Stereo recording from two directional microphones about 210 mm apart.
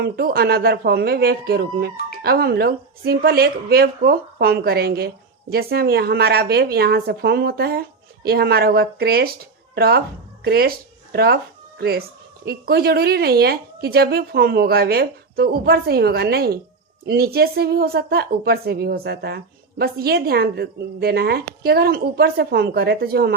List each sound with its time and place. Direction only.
0.0 s speech: 45° right (ahead or behind)